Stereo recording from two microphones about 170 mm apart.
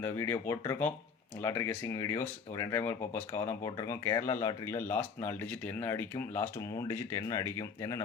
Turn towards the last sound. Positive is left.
turn(degrees=20)  # may be behind; listen again after turning